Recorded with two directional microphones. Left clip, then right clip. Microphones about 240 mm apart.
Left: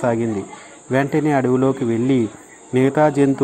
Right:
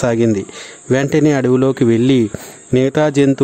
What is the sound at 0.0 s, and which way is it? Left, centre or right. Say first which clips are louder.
Speech: right 5 dB; right.